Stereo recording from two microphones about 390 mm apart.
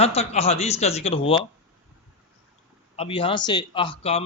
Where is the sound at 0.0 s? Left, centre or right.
Centre.